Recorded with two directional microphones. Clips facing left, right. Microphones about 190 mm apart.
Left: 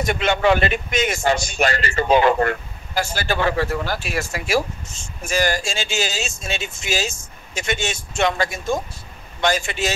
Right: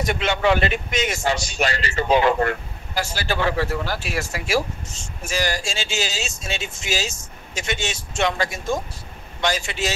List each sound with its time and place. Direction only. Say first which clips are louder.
0.0 s speech: left 2 dB; 50° left (ahead or behind)